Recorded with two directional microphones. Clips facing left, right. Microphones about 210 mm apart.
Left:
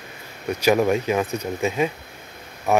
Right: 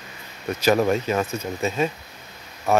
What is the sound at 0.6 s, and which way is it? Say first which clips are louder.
Speech: left 1 dB; 15° left (ahead or behind).